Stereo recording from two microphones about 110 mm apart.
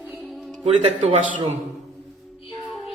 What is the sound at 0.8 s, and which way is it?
Speech, 80° right.